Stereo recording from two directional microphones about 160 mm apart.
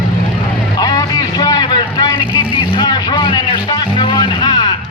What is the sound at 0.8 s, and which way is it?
Vehicle, 25° left (ahead or behind).